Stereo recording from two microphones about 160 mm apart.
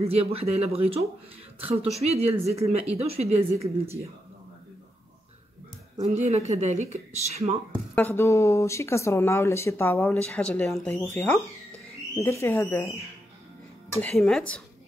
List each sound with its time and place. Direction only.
0.0 s a woman's voice: 40° right (ahead or behind)
5.9 s speech: 45° right (ahead or behind)
7.9 s speech: 10° left (ahead or behind)
14.0 s speech: 5° left (ahead or behind)